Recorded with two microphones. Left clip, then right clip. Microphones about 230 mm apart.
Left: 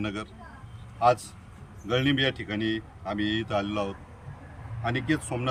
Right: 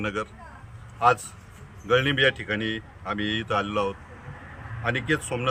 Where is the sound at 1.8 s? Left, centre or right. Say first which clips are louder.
Right 5 dB; centre.